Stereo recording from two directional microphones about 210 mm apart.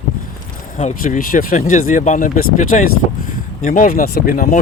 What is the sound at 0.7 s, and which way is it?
Speech, 35° left (ahead or behind).